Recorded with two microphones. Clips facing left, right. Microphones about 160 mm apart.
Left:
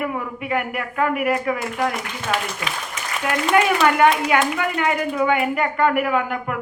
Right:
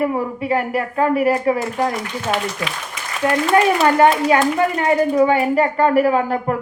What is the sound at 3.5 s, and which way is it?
A woman's voice, 35° right (ahead or behind).